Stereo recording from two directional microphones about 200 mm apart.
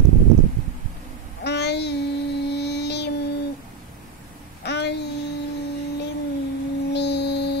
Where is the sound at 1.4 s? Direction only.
55° left (ahead or behind).